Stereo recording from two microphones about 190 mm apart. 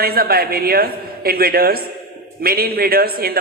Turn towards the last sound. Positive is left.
turn(degrees=-55)  # may be behind; listen again after turning